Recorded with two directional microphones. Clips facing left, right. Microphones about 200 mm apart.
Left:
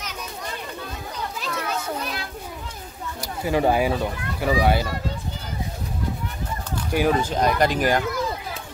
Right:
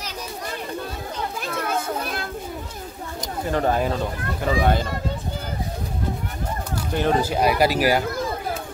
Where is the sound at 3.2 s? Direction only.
10° left (ahead or behind).